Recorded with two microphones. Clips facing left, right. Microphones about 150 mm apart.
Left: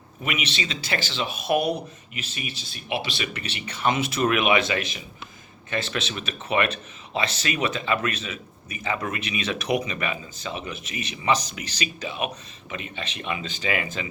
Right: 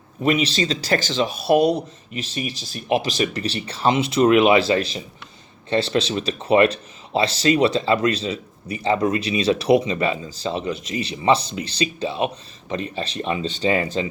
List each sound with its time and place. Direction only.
0.2 s speech: 35° right (ahead or behind)